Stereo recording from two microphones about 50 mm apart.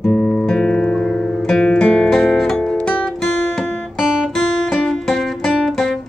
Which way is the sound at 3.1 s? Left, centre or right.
Centre.